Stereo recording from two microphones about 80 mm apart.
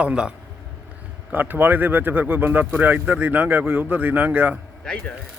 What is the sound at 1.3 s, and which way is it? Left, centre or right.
Speech, right.